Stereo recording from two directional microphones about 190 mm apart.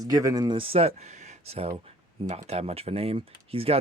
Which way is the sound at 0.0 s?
20° right (ahead or behind).